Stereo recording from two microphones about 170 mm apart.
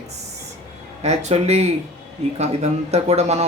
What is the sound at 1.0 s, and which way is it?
A woman's voice, 40° right (ahead or behind).